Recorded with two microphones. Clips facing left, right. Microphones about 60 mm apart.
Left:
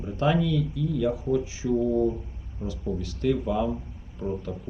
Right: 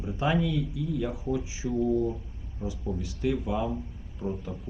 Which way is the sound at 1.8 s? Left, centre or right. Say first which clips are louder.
Left 1 dB; centre.